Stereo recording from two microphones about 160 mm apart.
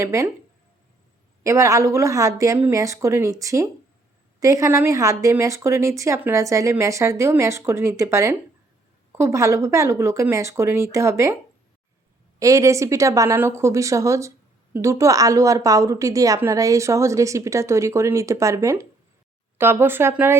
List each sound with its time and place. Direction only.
0.0 s speech: 20° right (ahead or behind)
1.5 s a woman's voice: 20° right (ahead or behind)
12.4 s a woman's voice: 20° right (ahead or behind)